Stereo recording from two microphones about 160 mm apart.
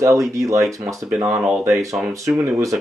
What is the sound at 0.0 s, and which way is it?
Speech, 20° right (ahead or behind).